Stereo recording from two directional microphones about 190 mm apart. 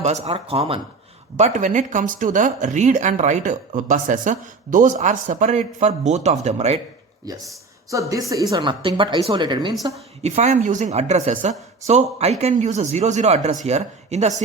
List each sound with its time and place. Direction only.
0.0 s speech: 35° right (ahead or behind)
7.3 s a woman's voice: 20° right (ahead or behind)
10.2 s speech: 35° right (ahead or behind)